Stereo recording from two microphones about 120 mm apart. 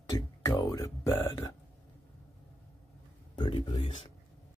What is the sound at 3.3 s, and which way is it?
Speech, 40° left (ahead or behind).